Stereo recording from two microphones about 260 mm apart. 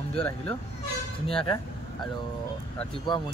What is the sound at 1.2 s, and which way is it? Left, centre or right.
Speech, left.